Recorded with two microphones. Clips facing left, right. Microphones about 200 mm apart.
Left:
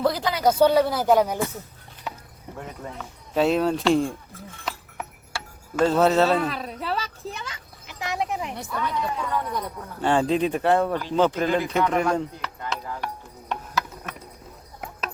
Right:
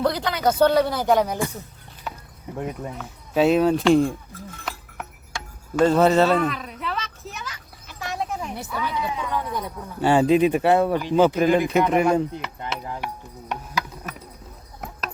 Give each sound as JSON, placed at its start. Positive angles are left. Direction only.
{"t": 0.0, "sound": "a sound", "side_deg": 5}
{"t": 0.6, "sound": "speech", "side_deg": 5}
{"t": 2.6, "sound": "speech", "side_deg": -15}
{"t": 3.0, "sound": "speech", "side_deg": -5}
{"t": 5.7, "sound": "speech", "side_deg": 0}
{"t": 6.4, "sound": "a sound", "side_deg": 30}
{"t": 7.9, "sound": "horse", "side_deg": 15}
{"t": 8.5, "sound": "speech", "side_deg": -5}
{"t": 12.4, "sound": "chop", "side_deg": -20}
{"t": 14.0, "sound": "a sound", "side_deg": -5}